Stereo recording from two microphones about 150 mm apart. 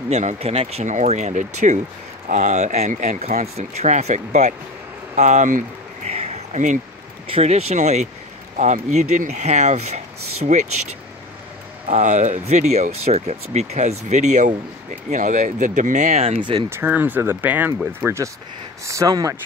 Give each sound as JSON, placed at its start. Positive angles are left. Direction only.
{"t": 0.1, "sound": "speech", "side_deg": -50}
{"t": 6.0, "sound": "a sound", "side_deg": -45}
{"t": 7.2, "sound": "speech", "side_deg": -40}
{"t": 11.9, "sound": "speech", "side_deg": -55}
{"t": 16.6, "sound": "speech", "side_deg": -15}